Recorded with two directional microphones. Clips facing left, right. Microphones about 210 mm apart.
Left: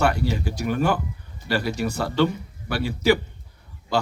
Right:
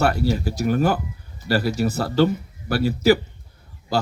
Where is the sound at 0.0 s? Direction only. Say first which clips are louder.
Right 2 dB; 40° right (ahead or behind).